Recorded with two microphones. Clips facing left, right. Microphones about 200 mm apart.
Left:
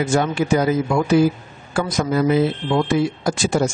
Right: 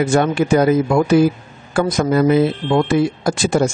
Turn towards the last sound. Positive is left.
turn(degrees=-60)  # may be behind; listen again after turning